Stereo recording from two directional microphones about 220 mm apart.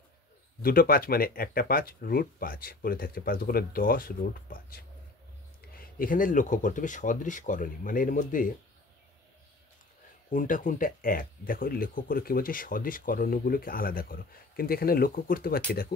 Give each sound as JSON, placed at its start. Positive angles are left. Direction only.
{"t": 0.6, "sound": "speech", "side_deg": 40}
{"t": 10.3, "sound": "speech", "side_deg": 35}